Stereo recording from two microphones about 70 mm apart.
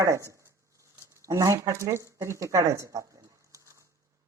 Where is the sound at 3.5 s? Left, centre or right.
Right.